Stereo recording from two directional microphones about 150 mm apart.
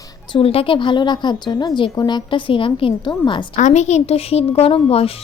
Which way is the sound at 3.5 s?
55° left (ahead or behind).